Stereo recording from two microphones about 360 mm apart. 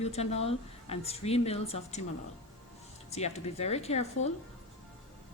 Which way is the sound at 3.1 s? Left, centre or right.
Centre.